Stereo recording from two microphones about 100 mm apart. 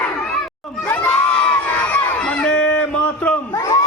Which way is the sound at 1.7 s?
10° left (ahead or behind).